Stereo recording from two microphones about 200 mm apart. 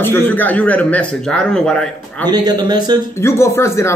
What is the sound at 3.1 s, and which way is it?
Speech, 15° left (ahead or behind).